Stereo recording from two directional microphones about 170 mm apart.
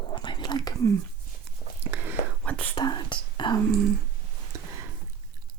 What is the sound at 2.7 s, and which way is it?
Speech, 25° left (ahead or behind).